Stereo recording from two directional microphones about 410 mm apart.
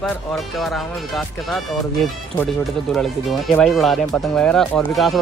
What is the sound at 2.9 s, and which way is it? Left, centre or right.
Speech, centre.